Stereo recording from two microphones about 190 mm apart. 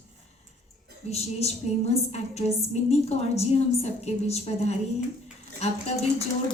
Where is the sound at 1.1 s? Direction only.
35° left (ahead or behind).